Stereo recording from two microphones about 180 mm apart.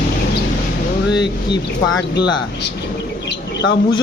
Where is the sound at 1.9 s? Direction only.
70° left (ahead or behind).